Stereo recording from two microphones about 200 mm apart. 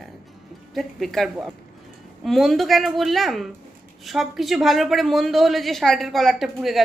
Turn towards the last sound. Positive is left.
turn(degrees=0)  # may be behind; listen again after turning